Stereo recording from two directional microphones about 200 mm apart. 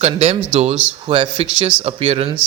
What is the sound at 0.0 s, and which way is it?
Speech, 30° right (ahead or behind).